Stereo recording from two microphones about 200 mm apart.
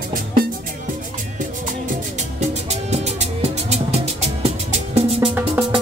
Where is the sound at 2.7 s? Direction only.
35° right (ahead or behind).